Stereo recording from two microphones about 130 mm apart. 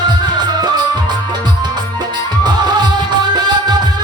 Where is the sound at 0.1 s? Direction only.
35° right (ahead or behind).